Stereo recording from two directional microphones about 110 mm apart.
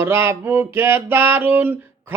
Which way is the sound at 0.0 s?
20° right (ahead or behind).